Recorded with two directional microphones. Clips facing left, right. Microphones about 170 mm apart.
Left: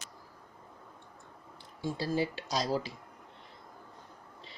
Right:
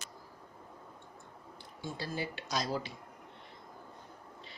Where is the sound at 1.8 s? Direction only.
30° left (ahead or behind).